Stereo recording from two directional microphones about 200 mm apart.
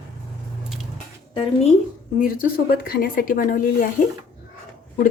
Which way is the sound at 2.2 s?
45° left (ahead or behind).